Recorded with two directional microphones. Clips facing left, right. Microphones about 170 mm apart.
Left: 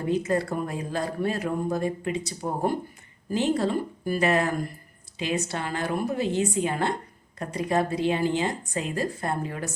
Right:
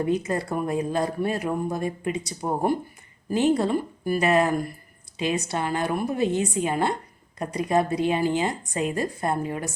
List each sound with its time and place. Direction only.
0.3 s speech: 20° right (ahead or behind)